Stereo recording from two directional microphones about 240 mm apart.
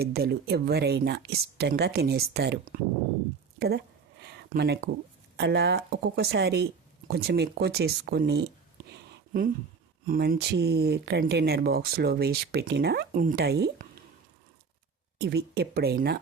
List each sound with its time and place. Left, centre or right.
0.0 s speech: right
3.6 s a sound: right
5.4 s speech: right
8.9 s a sound: right
10.1 s speech: right
15.2 s speech: right